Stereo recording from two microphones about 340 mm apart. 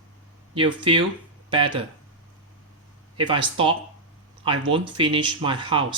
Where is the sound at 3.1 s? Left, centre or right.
Centre.